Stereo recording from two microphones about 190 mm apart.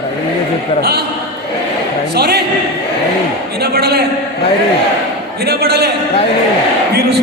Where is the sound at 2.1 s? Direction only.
55° right (ahead or behind).